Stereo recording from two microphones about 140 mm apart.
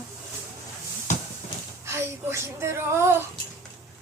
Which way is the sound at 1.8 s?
20° right (ahead or behind).